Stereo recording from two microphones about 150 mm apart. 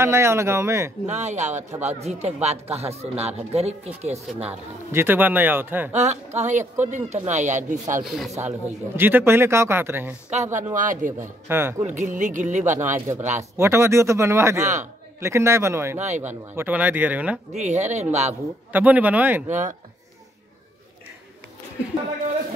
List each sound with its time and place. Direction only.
0.0 s a man's voice: 15° right (ahead or behind)
1.0 s a man's voice: 50° right (ahead or behind)
4.5 s a man's voice: 15° right (ahead or behind)
5.9 s a man's voice: 50° right (ahead or behind)
8.0 s speech: centre (ahead or behind)
8.4 s a man's voice: 15° right (ahead or behind)
10.3 s speech: 55° right (ahead or behind)
11.4 s a man's voice: 15° right (ahead or behind)
11.8 s a man's voice: 55° right (ahead or behind)
13.4 s a man's voice: 20° right (ahead or behind)
17.6 s a man's voice: 50° right (ahead or behind)
18.7 s a man's voice: 10° right (ahead or behind)